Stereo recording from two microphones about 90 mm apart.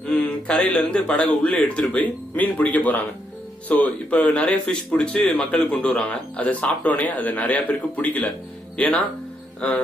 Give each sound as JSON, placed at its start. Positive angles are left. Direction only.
{"t": 0.0, "sound": "a man's voice", "side_deg": 10}